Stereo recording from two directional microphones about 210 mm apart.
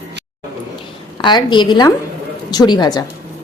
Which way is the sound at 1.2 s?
20° left (ahead or behind).